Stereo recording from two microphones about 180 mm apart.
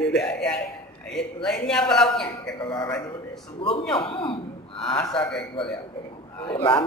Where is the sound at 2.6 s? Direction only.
25° left (ahead or behind).